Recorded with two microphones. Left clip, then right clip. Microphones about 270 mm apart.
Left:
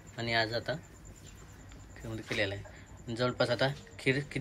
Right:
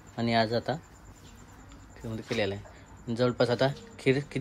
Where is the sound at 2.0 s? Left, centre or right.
Centre.